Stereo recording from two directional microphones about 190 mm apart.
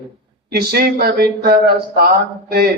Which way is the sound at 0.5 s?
55° right (ahead or behind).